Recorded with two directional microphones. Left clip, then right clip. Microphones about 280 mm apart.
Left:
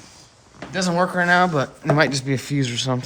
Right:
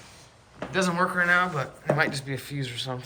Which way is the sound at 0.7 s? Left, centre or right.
Centre.